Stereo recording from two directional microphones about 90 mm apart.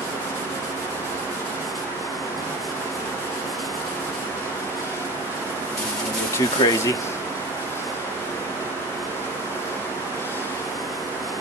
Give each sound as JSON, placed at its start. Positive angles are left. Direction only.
{"t": 6.6, "sound": "speech", "side_deg": 55}